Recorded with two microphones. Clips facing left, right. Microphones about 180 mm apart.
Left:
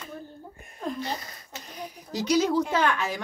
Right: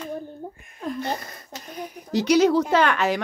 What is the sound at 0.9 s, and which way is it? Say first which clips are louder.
Speech: right 4 dB; 55° right (ahead or behind).